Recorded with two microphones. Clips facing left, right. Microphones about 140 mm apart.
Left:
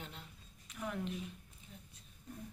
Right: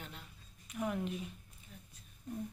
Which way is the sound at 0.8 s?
10° right (ahead or behind).